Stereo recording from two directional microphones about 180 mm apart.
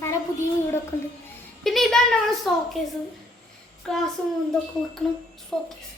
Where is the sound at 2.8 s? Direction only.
Centre (ahead or behind).